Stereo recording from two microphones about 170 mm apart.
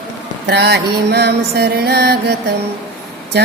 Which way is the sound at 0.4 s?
80° right.